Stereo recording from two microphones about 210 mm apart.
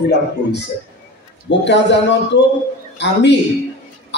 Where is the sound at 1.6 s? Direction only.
55° left (ahead or behind).